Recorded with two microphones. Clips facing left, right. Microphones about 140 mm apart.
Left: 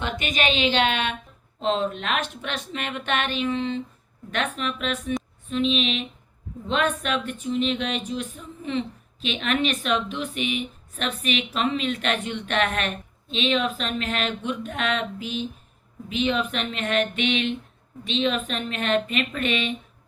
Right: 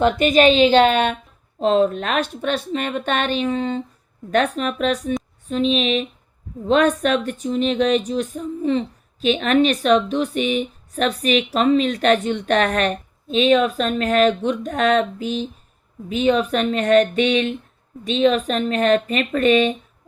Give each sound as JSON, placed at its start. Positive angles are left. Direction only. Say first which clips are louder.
{"t": 0.0, "sound": "speech", "louder": "right 12 dB", "side_deg": -40}